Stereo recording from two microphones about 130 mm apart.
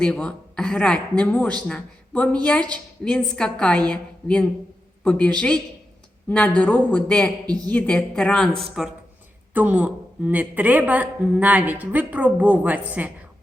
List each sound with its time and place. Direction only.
0.0 s speech: 5° left (ahead or behind)
7.4 s a woman's voice: 30° right (ahead or behind)
7.7 s speech: 10° left (ahead or behind)
9.6 s a woman's voice: 10° right (ahead or behind)